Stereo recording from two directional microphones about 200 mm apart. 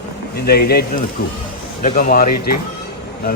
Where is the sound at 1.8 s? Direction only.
40° left (ahead or behind).